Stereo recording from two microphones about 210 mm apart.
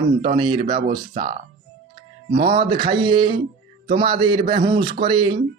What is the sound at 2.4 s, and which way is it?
Speech, 20° right (ahead or behind).